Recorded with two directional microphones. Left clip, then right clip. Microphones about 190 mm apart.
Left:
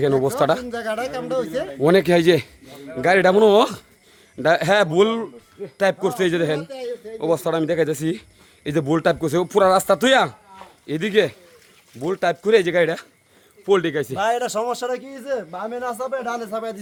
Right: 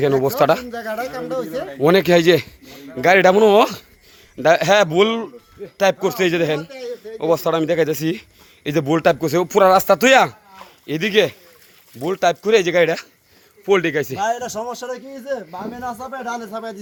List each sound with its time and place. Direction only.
0.3 s a man's voice: 10° right (ahead or behind)
14.2 s a man's voice: 30° left (ahead or behind)